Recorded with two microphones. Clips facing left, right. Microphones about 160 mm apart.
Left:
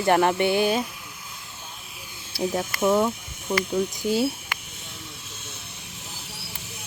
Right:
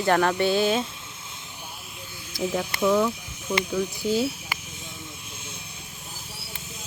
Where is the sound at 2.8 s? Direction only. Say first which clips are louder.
Left 1 dB; 25° left (ahead or behind).